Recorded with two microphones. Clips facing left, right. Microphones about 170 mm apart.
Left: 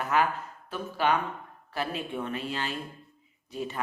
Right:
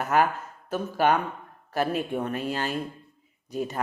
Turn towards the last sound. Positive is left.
turn(degrees=-45)  # may be behind; listen again after turning